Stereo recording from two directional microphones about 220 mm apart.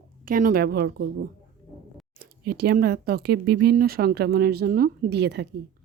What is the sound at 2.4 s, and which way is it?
Speech, 45° right (ahead or behind).